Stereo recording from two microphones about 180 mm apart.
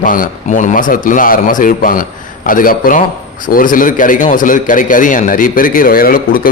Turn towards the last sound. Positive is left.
turn(degrees=55)  # may be behind; listen again after turning